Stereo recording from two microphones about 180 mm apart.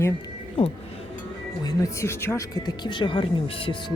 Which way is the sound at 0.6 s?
30° left (ahead or behind).